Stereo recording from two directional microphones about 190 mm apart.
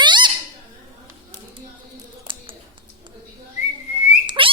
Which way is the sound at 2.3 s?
25° right (ahead or behind).